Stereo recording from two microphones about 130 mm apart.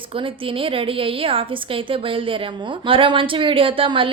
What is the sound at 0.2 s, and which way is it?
A woman's voice, 45° right (ahead or behind).